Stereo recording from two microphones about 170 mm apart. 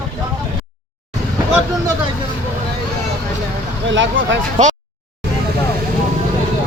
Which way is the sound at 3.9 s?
90° right.